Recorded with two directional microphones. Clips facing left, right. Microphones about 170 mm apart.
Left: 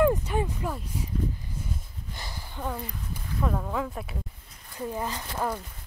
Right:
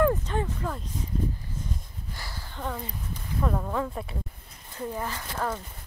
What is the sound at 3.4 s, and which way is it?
Speech, centre (ahead or behind).